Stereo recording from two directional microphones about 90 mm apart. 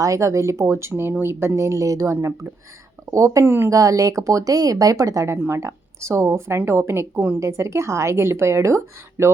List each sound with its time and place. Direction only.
0.0 s speech: 35° right (ahead or behind)
3.4 s speech: 25° right (ahead or behind)
3.7 s speech: 40° right (ahead or behind)